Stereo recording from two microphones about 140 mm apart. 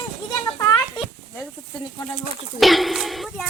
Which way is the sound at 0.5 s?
20° left (ahead or behind).